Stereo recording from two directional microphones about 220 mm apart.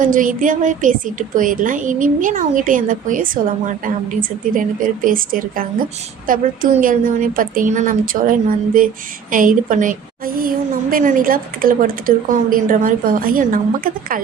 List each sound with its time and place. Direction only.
0.0 s a woman's voice: 35° right (ahead or behind)